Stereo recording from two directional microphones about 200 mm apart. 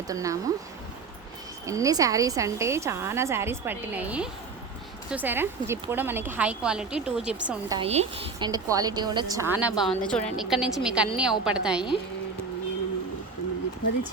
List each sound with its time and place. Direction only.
0.1 s a woman's voice: 15° right (ahead or behind)
1.6 s a woman's voice: 15° right (ahead or behind)
7.7 s a woman's voice: 30° right (ahead or behind); by 11.9 s 5° right (ahead or behind)